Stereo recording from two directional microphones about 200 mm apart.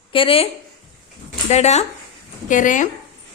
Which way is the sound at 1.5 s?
35° left (ahead or behind).